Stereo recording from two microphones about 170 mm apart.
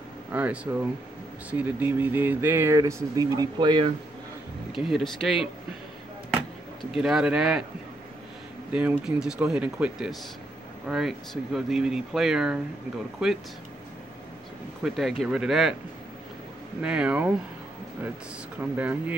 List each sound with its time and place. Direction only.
0.3 s speech: 10° right (ahead or behind); by 3.9 s 25° right (ahead or behind)
4.7 s speech: centre (ahead or behind)
7.0 s speech: 5° right (ahead or behind)
8.7 s speech: 5° right (ahead or behind)
14.8 s speech: centre (ahead or behind)
16.8 s speech: 5° right (ahead or behind)
18.6 s speech: 10° right (ahead or behind)